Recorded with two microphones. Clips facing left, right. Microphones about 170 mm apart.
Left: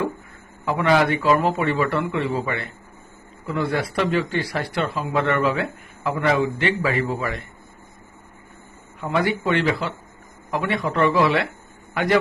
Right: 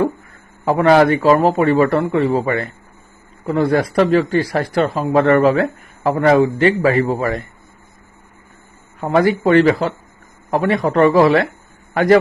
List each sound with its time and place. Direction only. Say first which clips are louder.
0.6 s speech: right 7 dB; 40° right (ahead or behind)
9.0 s a man's voice: right 7 dB; 45° right (ahead or behind)